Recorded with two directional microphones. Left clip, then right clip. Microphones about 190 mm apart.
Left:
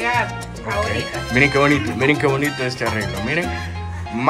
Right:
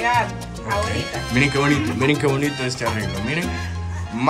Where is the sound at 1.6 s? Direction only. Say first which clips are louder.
Left 3 dB; 15° right (ahead or behind).